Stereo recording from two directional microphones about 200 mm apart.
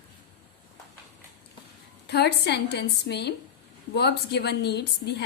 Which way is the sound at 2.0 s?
55° left (ahead or behind).